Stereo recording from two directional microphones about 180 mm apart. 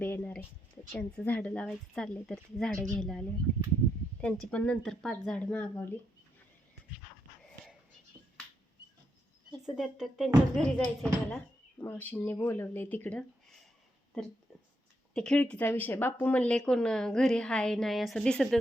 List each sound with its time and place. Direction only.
0.0 s speech: 10° left (ahead or behind)
8.1 s finger snapping: 20° right (ahead or behind)
9.6 s speech: centre (ahead or behind)
15.1 s speech: 5° left (ahead or behind)